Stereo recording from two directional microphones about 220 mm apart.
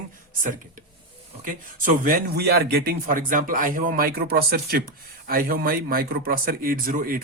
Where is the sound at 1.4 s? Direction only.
40° right (ahead or behind).